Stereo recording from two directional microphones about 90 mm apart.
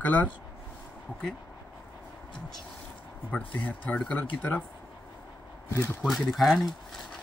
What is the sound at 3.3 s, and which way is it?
Speech, 15° left (ahead or behind).